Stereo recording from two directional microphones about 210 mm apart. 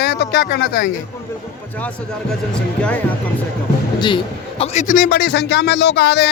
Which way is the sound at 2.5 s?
5° left (ahead or behind).